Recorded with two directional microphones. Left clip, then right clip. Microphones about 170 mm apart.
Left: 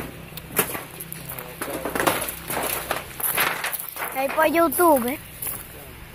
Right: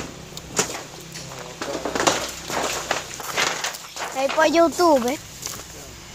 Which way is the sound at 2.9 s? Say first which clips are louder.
Right 2 dB; 15° left (ahead or behind).